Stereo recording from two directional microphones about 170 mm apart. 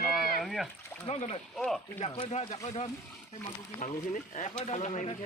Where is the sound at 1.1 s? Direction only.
40° left (ahead or behind).